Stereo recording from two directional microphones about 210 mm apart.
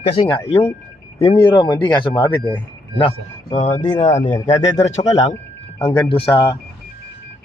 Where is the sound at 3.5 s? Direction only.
35° left (ahead or behind).